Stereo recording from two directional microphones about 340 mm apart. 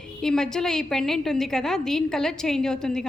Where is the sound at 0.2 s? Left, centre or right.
Centre.